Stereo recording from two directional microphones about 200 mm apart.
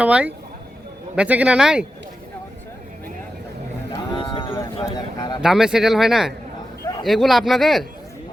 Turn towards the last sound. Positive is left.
turn(degrees=0)  # may be behind; listen again after turning